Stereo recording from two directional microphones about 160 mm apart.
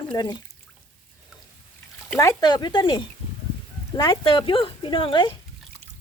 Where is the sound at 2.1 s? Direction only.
25° left (ahead or behind).